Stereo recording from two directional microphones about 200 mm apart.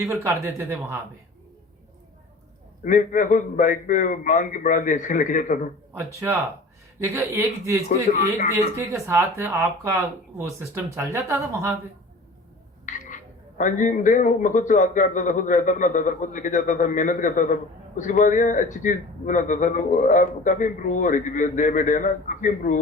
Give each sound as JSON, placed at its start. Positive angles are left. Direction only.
{"t": 0.0, "sound": "speech", "side_deg": -15}
{"t": 2.8, "sound": "a man's voice", "side_deg": 40}
{"t": 6.1, "sound": "speech", "side_deg": -15}
{"t": 8.1, "sound": "a man's voice", "side_deg": 35}
{"t": 8.7, "sound": "speech", "side_deg": -15}
{"t": 12.9, "sound": "frog", "side_deg": 40}
{"t": 13.6, "sound": "a man's voice", "side_deg": 40}